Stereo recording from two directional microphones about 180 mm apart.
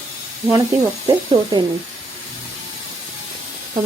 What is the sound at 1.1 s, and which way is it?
Speech, 25° right (ahead or behind).